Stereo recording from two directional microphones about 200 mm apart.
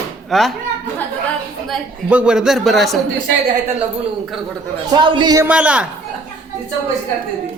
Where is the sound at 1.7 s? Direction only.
5° right (ahead or behind).